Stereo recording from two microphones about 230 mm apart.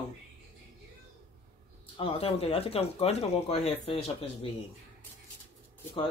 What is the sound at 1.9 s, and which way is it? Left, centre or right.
Speech, left.